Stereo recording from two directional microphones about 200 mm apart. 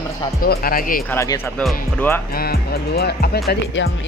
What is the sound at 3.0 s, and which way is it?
Speech, 50° left (ahead or behind).